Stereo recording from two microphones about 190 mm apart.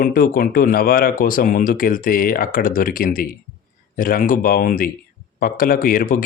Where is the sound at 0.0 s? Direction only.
50° left (ahead or behind).